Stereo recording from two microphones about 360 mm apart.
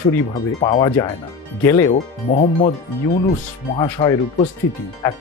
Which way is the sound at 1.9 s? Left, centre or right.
Centre.